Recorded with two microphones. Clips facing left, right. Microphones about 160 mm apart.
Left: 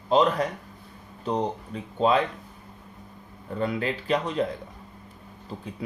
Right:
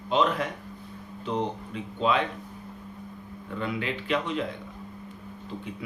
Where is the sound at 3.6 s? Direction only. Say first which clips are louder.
Left 4 dB; 40° left (ahead or behind).